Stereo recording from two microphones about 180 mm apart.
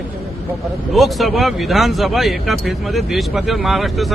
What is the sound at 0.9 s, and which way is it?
Speech, centre (ahead or behind).